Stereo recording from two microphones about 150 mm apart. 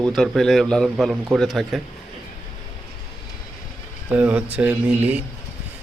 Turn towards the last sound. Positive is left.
turn(degrees=-10)  # may be behind; listen again after turning